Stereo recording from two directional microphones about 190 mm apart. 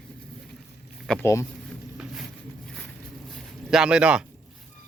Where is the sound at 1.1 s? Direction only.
15° left (ahead or behind).